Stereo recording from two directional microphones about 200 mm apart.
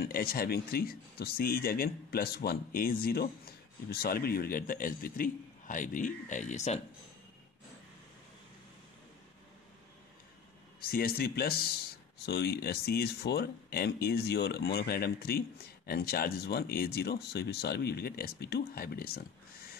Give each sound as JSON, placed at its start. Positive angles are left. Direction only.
{"t": 0.0, "sound": "speech", "side_deg": 50}
{"t": 10.8, "sound": "speech", "side_deg": 50}